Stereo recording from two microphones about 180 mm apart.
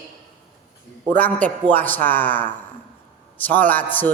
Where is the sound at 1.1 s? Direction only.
10° left (ahead or behind).